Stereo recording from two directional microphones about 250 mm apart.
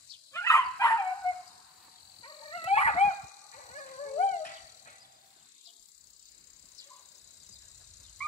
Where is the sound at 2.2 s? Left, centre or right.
Left.